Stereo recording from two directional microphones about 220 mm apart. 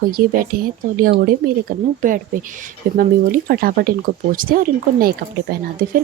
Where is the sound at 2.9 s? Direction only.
40° right (ahead or behind).